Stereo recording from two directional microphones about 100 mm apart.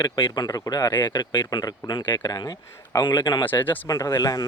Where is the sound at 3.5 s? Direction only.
20° left (ahead or behind).